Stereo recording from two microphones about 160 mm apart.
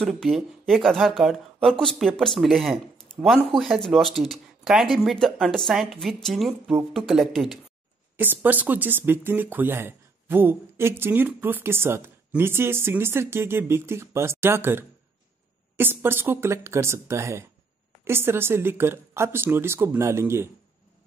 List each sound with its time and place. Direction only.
0.0 s speech: centre (ahead or behind)
8.2 s speech: 10° right (ahead or behind)